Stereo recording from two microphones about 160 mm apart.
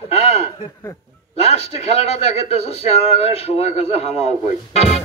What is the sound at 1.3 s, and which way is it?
Speech, 40° left (ahead or behind).